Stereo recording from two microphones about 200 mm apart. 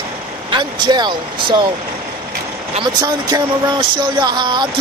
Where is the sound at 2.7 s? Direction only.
20° right (ahead or behind).